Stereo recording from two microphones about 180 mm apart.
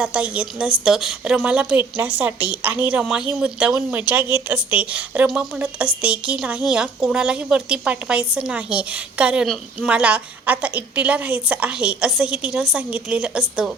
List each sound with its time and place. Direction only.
0.0 s a woman's voice: 5° right (ahead or behind)